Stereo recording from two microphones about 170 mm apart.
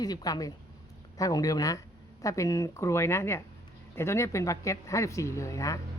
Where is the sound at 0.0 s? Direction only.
25° left (ahead or behind).